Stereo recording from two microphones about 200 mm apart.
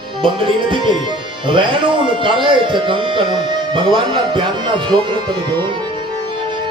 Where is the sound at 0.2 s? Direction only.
25° right (ahead or behind).